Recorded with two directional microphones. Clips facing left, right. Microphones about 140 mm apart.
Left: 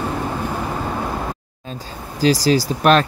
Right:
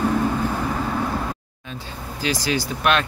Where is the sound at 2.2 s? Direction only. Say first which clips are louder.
Left 8 dB; 35° left (ahead or behind).